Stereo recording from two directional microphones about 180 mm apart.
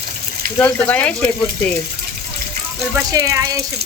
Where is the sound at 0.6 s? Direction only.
10° left (ahead or behind).